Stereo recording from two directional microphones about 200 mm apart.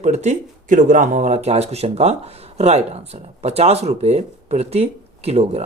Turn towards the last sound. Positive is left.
turn(degrees=-30)  # may be behind; listen again after turning